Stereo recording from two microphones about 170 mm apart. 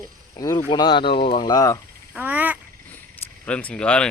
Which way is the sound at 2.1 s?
10° right (ahead or behind).